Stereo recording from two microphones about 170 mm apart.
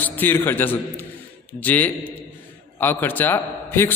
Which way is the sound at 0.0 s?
10° left (ahead or behind).